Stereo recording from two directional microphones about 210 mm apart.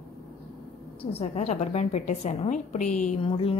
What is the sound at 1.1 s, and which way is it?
A woman's voice, 30° left (ahead or behind).